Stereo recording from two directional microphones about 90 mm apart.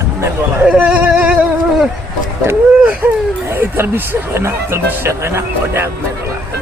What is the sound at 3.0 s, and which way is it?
Speech, 20° right (ahead or behind).